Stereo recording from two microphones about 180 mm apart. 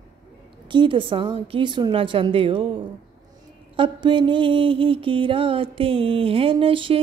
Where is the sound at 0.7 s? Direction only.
25° right (ahead or behind).